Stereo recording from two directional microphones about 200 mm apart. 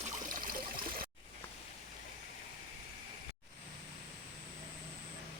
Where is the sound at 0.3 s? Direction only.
45° right (ahead or behind).